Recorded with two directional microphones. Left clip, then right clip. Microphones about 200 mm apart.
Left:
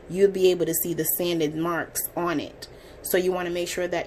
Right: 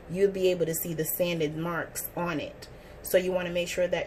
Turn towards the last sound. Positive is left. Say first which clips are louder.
# left 1 dB
turn(degrees=35)  # may be behind; listen again after turning